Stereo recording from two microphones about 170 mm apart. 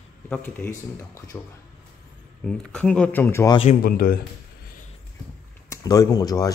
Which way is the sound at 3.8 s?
60° left (ahead or behind).